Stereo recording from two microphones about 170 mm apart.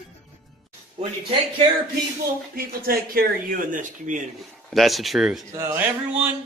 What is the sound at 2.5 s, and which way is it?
Speech, 60° right (ahead or behind).